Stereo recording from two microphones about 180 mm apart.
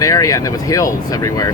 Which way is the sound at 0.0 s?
20° left (ahead or behind).